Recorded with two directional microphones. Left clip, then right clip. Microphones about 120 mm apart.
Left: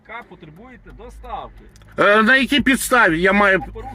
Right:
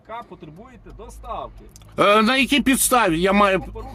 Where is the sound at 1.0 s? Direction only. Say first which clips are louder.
Even; 60° right (ahead or behind).